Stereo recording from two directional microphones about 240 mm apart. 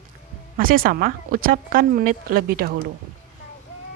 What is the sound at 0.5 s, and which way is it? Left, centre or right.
Speech, right.